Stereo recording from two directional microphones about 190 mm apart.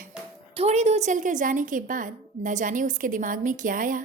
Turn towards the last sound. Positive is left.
turn(degrees=-45)  # may be behind; listen again after turning